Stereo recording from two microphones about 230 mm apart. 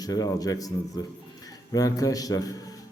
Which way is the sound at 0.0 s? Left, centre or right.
Centre.